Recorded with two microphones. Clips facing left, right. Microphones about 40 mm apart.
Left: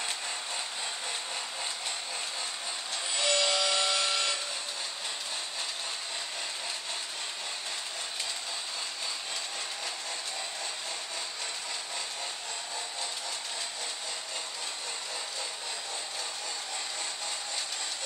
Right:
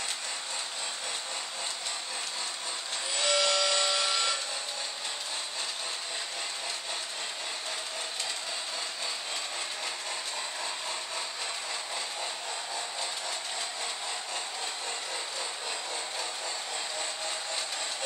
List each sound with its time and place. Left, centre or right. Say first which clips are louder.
3.2 s wood: right 1 dB; centre